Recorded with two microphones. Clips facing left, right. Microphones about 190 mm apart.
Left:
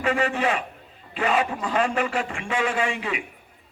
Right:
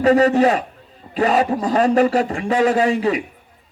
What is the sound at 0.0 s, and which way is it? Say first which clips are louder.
A man's voice: right 10 dB; 40° right (ahead or behind).